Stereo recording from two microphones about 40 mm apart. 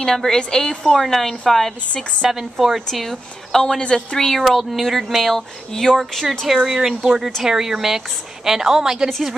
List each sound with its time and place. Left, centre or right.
0.0 s speech: centre
0.9 s speech: centre
2.2 s a woman's voice: centre
2.9 s speech: centre
4.4 s speech: centre
5.7 s speech: centre
6.4 s a woman's voice: centre